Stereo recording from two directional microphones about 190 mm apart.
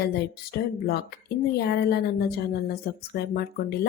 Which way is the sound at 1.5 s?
60° left (ahead or behind).